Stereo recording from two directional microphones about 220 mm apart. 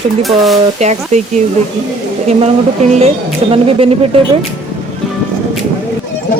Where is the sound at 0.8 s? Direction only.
30° right (ahead or behind).